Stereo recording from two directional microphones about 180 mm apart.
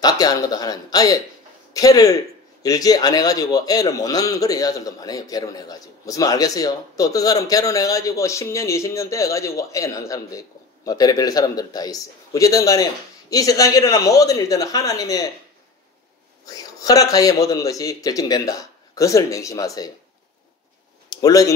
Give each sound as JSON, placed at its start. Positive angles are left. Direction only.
{"t": 0.0, "sound": "a man's voice", "side_deg": 20}
{"t": 16.4, "sound": "a man's voice", "side_deg": 20}
{"t": 21.1, "sound": "speech", "side_deg": 20}